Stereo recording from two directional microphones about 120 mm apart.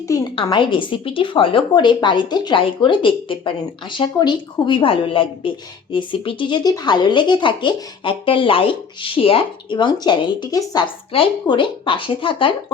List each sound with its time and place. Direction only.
0.5 s a woman's voice: 45° left (ahead or behind)